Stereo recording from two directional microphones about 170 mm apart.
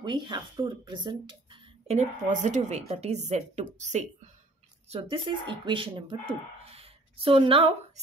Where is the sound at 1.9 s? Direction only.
45° right (ahead or behind).